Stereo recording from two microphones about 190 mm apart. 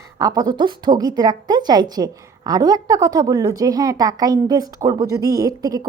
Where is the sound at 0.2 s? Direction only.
20° right (ahead or behind).